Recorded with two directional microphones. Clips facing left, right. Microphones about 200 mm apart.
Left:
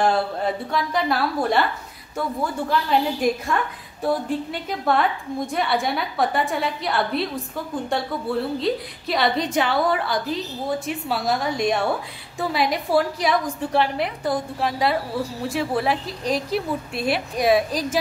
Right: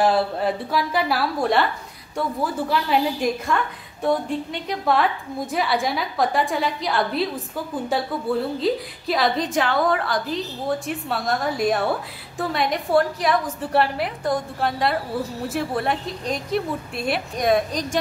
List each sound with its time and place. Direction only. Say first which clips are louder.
0.0 s a woman's voice: right 1 dB; centre (ahead or behind)